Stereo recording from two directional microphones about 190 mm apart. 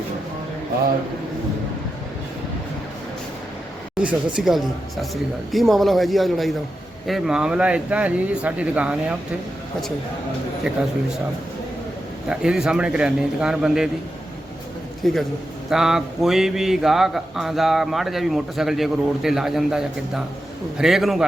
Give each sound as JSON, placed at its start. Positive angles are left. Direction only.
{"t": 4.0, "sound": "a man's voice", "side_deg": -5}
{"t": 12.3, "sound": "a man's voice", "side_deg": -5}
{"t": 15.0, "sound": "a man's voice", "side_deg": 0}